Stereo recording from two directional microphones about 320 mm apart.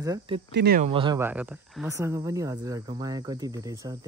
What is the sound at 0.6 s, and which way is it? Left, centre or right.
Speech, right.